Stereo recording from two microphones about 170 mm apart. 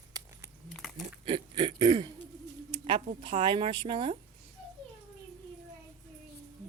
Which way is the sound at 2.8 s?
30° right (ahead or behind).